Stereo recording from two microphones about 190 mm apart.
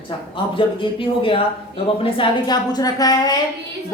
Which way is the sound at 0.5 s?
25° left (ahead or behind).